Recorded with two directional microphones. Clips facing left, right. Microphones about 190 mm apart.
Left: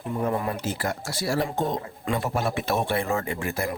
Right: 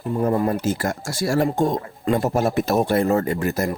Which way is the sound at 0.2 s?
40° right (ahead or behind).